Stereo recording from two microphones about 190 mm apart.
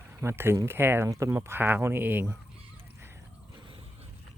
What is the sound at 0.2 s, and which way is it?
Speech, 10° right (ahead or behind).